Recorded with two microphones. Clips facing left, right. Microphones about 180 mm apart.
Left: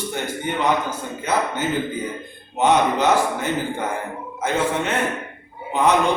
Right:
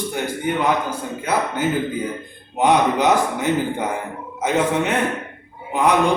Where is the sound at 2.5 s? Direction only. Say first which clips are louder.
Right 1 dB; 15° right (ahead or behind).